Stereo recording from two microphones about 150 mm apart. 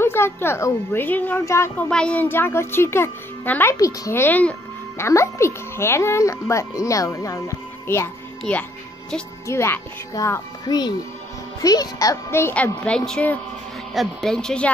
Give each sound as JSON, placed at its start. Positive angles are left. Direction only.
{"t": 0.0, "sound": "a woman's voice", "side_deg": 15}
{"t": 1.9, "sound": "a woman's voice", "side_deg": 5}